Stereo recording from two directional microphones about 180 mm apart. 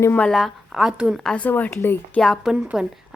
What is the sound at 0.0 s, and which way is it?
A woman's voice, 10° left (ahead or behind).